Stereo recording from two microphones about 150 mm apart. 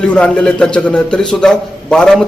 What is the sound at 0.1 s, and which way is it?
Speech, 5° left (ahead or behind).